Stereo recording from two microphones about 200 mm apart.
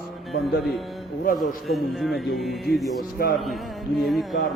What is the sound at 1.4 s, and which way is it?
A man's voice, centre (ahead or behind).